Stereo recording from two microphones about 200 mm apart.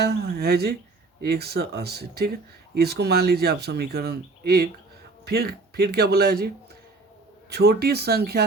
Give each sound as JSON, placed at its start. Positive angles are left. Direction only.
{"t": 0.0, "sound": "speech", "side_deg": -55}
{"t": 7.5, "sound": "speech", "side_deg": -50}